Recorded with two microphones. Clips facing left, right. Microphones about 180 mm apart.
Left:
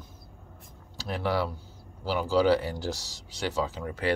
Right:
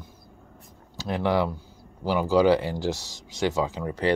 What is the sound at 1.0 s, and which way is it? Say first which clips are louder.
Speech: right 4 dB; 15° right (ahead or behind).